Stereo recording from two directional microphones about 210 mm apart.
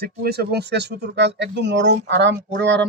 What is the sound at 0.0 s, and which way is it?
Speech, 50° right (ahead or behind).